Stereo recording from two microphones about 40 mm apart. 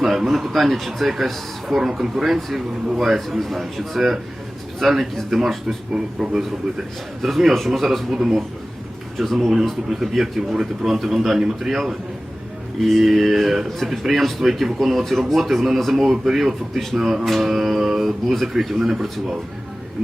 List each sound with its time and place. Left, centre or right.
0.0 s speech: centre
3.2 s speech: centre
5.9 s speech: right
7.2 s speech: centre
8.1 s speech: centre